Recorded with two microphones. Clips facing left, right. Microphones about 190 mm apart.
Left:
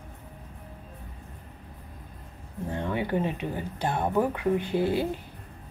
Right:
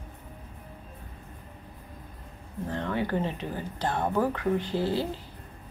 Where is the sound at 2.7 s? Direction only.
15° left (ahead or behind).